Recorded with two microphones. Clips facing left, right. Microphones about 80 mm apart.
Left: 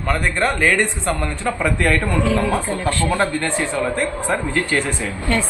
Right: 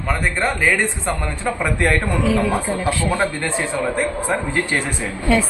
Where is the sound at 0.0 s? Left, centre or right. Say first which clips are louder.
Left 1 dB; centre.